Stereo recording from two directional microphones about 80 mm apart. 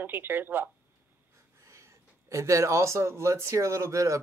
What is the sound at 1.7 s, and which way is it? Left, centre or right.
Speech, right.